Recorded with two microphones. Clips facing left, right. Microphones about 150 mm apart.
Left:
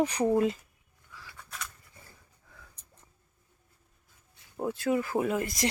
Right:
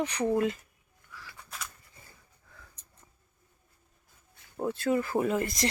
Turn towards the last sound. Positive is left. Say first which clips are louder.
# right 1 dB
turn(degrees=5)  # may be behind; listen again after turning